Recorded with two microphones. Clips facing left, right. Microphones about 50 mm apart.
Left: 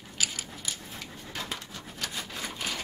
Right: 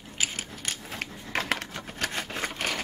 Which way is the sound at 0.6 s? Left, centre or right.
Right.